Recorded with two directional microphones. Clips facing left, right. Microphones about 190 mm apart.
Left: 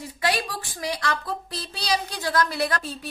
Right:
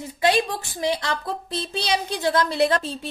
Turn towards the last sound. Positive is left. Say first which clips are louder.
# right 6 dB
turn(degrees=-25)  # may be behind; listen again after turning